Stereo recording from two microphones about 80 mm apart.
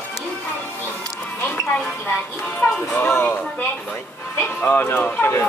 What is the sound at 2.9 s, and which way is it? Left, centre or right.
Speech, left.